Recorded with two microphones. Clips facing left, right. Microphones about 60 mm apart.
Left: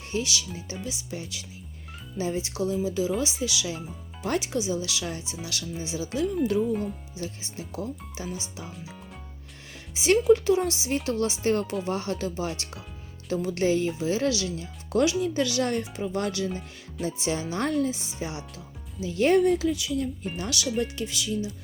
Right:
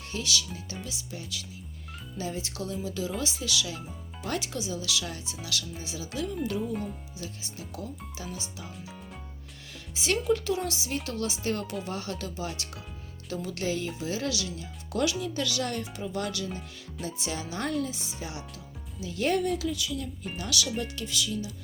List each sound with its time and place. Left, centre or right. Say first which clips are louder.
0.1 s speech: left 3 dB; left
6.6 s speech: left 6 dB; centre
7.2 s speech: left 5 dB; left
9.9 s speech: left 7 dB; left
15.2 s speech: left 5 dB; left
16.5 s speech: left 3 dB; centre
17.1 s speech: left 6 dB; left
17.8 s speech: left 6 dB; left